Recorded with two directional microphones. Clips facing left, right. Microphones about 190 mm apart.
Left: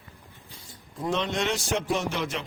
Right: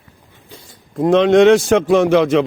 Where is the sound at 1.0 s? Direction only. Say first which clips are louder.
Right 17 dB; 90° right.